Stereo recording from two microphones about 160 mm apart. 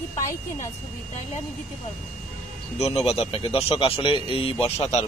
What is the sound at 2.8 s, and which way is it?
A man's voice, 40° left (ahead or behind).